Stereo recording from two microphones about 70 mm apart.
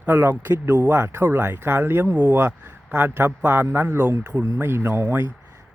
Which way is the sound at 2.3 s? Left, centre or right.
Right.